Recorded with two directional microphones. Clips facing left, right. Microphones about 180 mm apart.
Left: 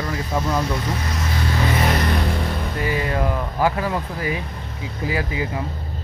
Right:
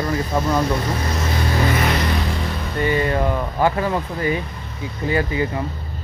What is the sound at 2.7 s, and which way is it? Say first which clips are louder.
Speech: right 5 dB; 5° left (ahead or behind).